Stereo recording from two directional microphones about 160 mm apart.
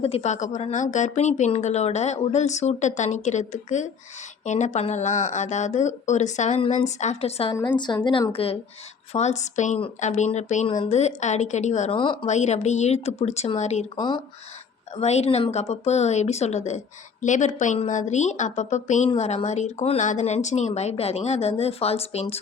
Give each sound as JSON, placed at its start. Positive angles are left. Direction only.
{"t": 0.0, "sound": "a woman's voice", "side_deg": 40}
{"t": 7.8, "sound": "a woman's voice", "side_deg": 25}
{"t": 11.9, "sound": "a woman's voice", "side_deg": 30}
{"t": 12.2, "sound": "speech", "side_deg": 45}
{"t": 13.9, "sound": "a woman's voice", "side_deg": 30}
{"t": 15.0, "sound": "speech", "side_deg": 40}